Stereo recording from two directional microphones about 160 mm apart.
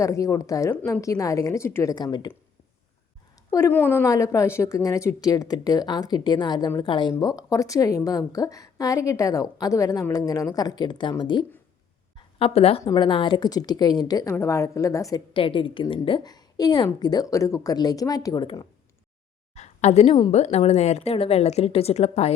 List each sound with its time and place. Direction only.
0.0 s speech: 20° left (ahead or behind)
0.7 s a woman's voice: 10° left (ahead or behind); by 2.3 s 25° left (ahead or behind)
3.7 s speech: 10° left (ahead or behind); by 11.4 s 30° left (ahead or behind)
12.1 s a sound: 35° left (ahead or behind)
12.8 s speech: 25° left (ahead or behind)
15.3 s speech: 35° left (ahead or behind)
19.5 s a sound: 45° left (ahead or behind)
20.3 s speech: 40° left (ahead or behind)